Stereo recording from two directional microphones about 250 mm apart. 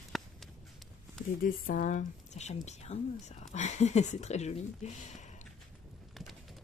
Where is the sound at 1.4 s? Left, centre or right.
Left.